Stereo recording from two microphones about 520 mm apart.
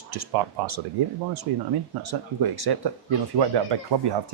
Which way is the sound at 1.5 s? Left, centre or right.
Right.